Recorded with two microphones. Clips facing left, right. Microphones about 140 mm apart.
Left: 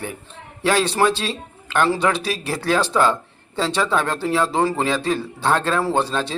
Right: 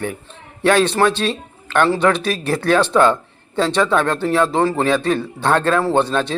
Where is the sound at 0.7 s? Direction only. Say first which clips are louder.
Right 3 dB; 10° left (ahead or behind).